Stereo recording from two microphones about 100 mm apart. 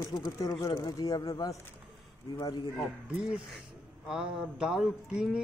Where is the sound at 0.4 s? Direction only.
35° left (ahead or behind).